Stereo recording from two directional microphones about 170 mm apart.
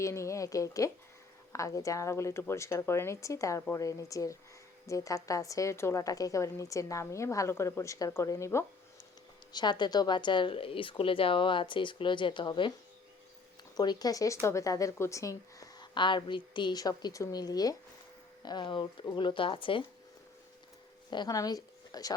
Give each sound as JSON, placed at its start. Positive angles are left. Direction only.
{"t": 0.0, "sound": "a woman's voice", "side_deg": 15}
{"t": 13.7, "sound": "a woman's voice", "side_deg": 25}
{"t": 21.1, "sound": "a woman's voice", "side_deg": 25}